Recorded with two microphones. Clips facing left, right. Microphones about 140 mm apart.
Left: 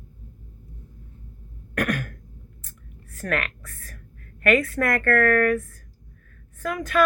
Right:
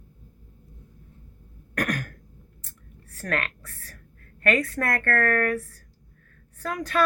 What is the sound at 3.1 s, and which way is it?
A woman's voice, 35° right (ahead or behind).